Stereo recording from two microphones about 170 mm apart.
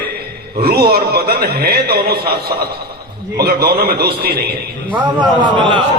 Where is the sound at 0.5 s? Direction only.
65° right (ahead or behind).